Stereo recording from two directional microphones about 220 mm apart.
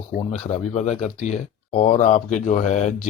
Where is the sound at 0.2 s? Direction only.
30° left (ahead or behind).